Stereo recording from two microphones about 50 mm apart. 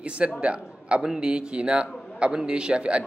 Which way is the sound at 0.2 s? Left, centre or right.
Right.